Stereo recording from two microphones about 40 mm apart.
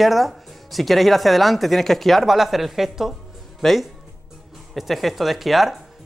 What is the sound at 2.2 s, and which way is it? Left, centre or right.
Speech, centre.